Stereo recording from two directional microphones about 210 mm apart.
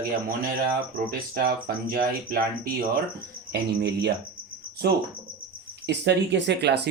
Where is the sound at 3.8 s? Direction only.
50° right (ahead or behind).